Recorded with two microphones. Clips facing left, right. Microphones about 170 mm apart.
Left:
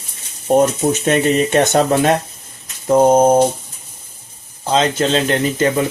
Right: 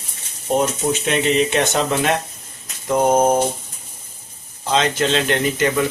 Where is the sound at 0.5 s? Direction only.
45° left (ahead or behind).